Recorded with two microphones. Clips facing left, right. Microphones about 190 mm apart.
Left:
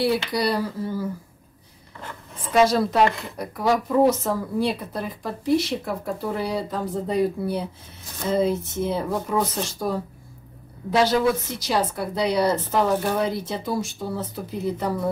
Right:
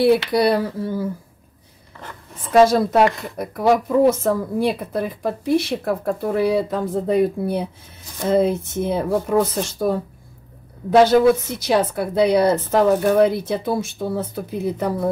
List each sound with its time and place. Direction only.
0.0 s speech: 55° right (ahead or behind)
2.6 s speech: 50° right (ahead or behind)
11.0 s speech: 55° right (ahead or behind)